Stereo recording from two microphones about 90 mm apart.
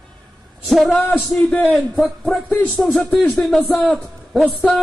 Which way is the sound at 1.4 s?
15° left (ahead or behind).